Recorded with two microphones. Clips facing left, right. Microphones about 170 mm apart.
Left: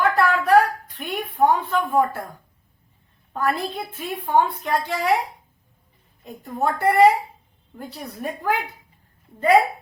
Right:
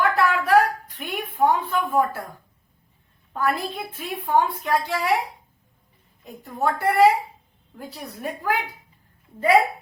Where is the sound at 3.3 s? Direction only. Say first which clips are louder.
Left 1 dB; centre (ahead or behind).